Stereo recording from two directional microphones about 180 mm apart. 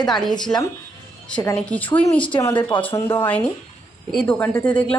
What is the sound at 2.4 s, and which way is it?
Speech, 25° left (ahead or behind).